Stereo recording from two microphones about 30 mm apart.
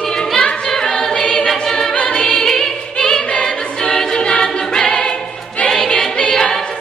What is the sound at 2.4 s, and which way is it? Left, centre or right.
Music, centre.